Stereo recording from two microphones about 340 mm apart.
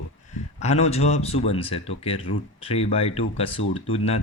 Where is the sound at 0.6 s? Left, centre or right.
Centre.